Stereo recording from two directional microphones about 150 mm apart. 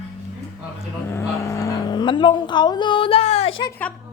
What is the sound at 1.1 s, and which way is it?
Vehicle, 20° left (ahead or behind).